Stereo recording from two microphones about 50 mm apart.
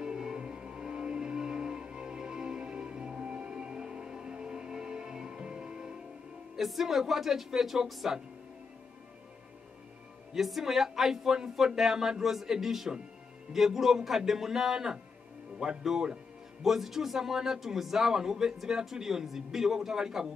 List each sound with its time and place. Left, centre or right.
0.0 s music: centre
6.5 s speech: centre
10.3 s speech: centre